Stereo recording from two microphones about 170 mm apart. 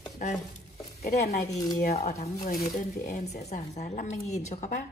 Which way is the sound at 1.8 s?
40° left (ahead or behind).